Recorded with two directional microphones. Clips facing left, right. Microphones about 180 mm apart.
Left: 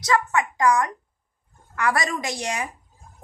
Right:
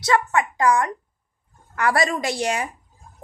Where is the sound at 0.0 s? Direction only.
30° right (ahead or behind).